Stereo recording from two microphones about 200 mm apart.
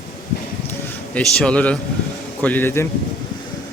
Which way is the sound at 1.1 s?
5° left (ahead or behind).